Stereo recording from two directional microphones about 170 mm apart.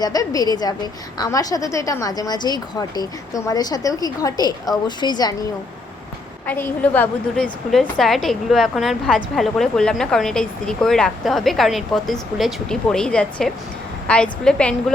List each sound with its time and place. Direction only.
0.0 s a woman's voice: 20° left (ahead or behind)
6.5 s a woman's voice: 10° left (ahead or behind)